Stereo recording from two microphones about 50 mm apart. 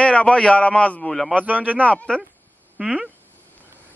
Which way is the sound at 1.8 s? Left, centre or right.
Left.